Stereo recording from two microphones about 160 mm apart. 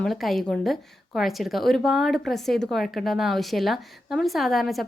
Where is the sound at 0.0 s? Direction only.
Centre (ahead or behind).